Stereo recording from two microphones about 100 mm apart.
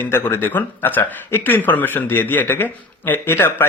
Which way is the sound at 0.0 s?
25° left (ahead or behind).